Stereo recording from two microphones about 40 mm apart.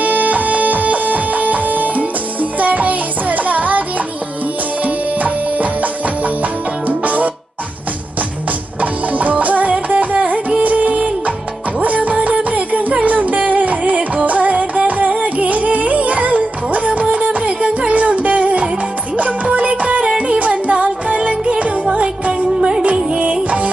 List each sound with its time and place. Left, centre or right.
0.0 s music: right
4.8 s music: right
9.1 s music: right